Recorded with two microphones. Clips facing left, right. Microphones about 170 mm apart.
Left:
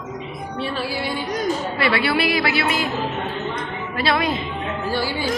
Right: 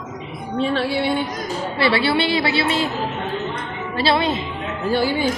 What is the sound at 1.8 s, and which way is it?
A woman's voice, 30° right (ahead or behind).